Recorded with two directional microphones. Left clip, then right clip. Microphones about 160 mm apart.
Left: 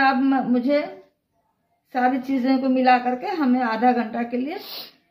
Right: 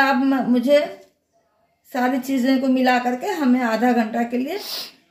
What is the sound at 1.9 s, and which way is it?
A woman's voice, 45° right (ahead or behind).